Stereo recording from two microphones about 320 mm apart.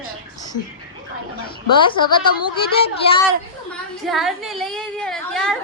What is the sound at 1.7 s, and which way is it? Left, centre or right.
A woman's voice, centre.